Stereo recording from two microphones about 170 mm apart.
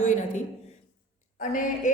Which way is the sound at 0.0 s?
45° left (ahead or behind).